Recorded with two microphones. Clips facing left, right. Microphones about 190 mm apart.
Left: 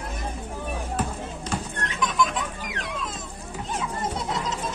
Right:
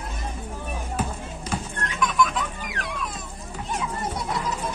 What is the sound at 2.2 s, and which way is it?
Music, 20° left (ahead or behind).